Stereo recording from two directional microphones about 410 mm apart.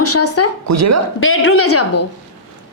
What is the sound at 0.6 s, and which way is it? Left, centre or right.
Speech, right.